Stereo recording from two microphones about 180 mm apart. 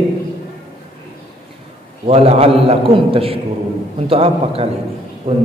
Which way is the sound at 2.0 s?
35° right (ahead or behind).